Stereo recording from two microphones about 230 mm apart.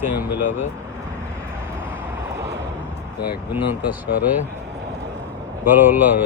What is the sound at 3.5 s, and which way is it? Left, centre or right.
Speech, centre.